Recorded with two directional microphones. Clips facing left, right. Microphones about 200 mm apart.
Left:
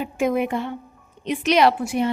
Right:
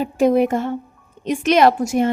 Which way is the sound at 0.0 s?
35° right (ahead or behind).